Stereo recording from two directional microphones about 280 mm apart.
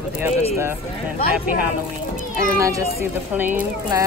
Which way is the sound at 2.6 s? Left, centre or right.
Centre.